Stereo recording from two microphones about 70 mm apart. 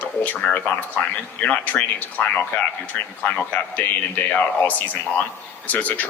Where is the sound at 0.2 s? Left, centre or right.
Left.